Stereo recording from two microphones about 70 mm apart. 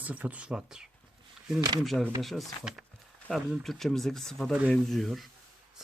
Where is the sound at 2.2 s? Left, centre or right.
Centre.